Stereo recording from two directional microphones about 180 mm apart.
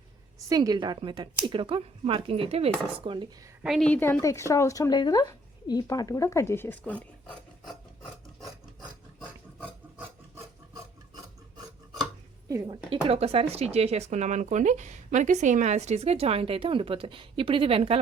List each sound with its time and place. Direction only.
0.3 s speech: 20° right (ahead or behind)
3.6 s speech: centre (ahead or behind)
12.6 s speech: 30° right (ahead or behind)